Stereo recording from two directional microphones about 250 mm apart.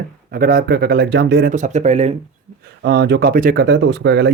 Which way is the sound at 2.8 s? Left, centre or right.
Right.